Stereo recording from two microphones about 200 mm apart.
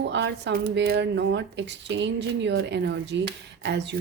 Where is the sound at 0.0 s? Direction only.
60° right (ahead or behind).